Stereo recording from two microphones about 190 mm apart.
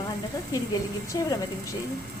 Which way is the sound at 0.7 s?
20° left (ahead or behind).